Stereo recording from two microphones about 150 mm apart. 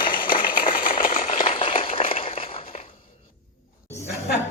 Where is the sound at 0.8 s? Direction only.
70° left (ahead or behind).